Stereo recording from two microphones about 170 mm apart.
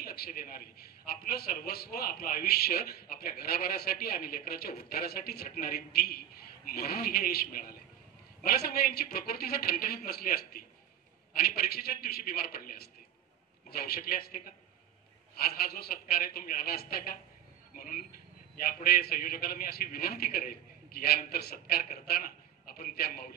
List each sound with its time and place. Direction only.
0.0 s a man's voice: 65° left (ahead or behind)